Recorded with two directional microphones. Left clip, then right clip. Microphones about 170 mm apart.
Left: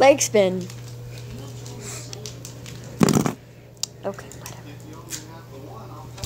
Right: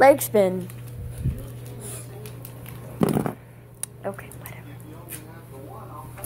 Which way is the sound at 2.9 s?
40° left (ahead or behind).